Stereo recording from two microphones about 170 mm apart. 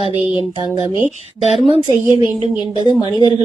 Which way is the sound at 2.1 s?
25° left (ahead or behind).